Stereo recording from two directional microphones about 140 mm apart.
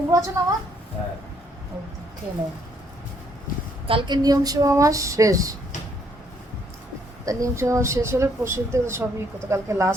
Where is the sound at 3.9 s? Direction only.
35° right (ahead or behind).